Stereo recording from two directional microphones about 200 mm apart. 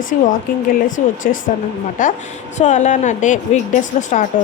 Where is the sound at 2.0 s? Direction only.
40° left (ahead or behind).